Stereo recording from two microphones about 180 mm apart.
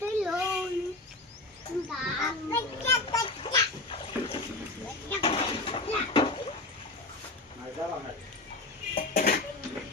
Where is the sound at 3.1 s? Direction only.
30° left (ahead or behind).